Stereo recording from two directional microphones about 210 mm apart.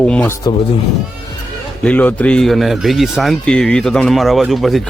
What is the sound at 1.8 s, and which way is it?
A man's voice, 5° left (ahead or behind).